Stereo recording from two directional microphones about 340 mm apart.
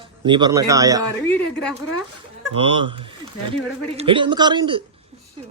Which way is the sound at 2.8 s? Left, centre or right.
Centre.